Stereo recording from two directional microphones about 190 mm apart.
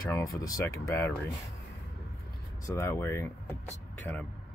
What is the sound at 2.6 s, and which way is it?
Speech, 15° left (ahead or behind).